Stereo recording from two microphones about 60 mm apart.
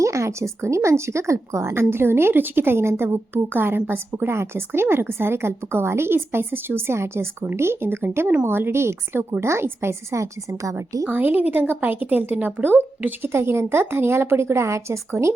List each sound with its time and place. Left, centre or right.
0.0 s a woman's voice: right
11.1 s a woman's voice: right
13.2 s a woman's voice: right